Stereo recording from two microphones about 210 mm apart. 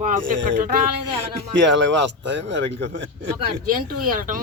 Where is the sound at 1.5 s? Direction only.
60° right (ahead or behind).